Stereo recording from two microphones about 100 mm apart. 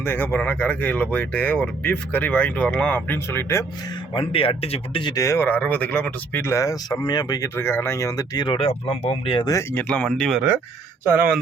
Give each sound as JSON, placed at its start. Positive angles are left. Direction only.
{"t": 0.0, "sound": "speech", "side_deg": 20}
{"t": 3.2, "sound": "speech", "side_deg": 25}
{"t": 4.1, "sound": "speech", "side_deg": 65}
{"t": 5.0, "sound": "speech", "side_deg": 35}
{"t": 6.4, "sound": "speech", "side_deg": 30}
{"t": 7.0, "sound": "speech", "side_deg": 45}
{"t": 7.4, "sound": "speech", "side_deg": 25}
{"t": 8.5, "sound": "speech", "side_deg": 75}
{"t": 9.7, "sound": "speech", "side_deg": 10}